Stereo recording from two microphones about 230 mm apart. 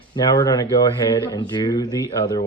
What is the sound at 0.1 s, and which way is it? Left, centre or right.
Speech, centre.